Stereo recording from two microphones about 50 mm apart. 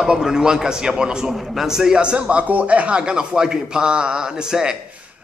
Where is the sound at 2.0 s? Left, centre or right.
Right.